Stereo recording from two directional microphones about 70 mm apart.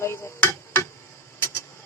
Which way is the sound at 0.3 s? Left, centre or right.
Left.